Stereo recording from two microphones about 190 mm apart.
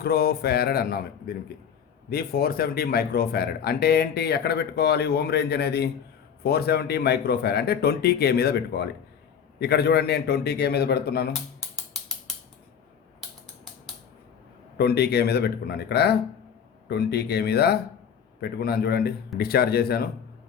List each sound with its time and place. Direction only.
0.0 s speech: 55° left (ahead or behind)
14.8 s speech: 60° left (ahead or behind)